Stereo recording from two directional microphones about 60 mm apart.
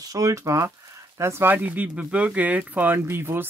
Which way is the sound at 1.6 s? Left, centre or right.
Right.